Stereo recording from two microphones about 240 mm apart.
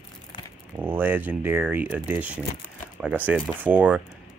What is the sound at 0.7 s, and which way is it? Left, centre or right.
Speech, centre.